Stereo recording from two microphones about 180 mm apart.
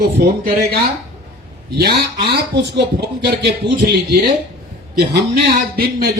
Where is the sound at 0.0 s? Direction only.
55° right (ahead or behind).